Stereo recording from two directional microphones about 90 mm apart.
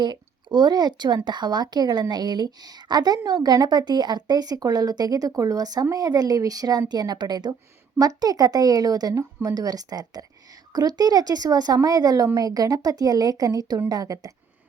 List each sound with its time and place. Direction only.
0.0 s a woman's voice: 55° right (ahead or behind)